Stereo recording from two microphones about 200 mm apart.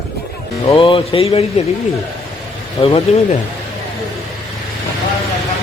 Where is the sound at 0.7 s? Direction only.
30° left (ahead or behind).